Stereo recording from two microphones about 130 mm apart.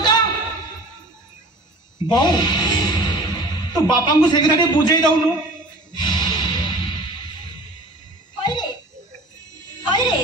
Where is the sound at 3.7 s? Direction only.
35° left (ahead or behind).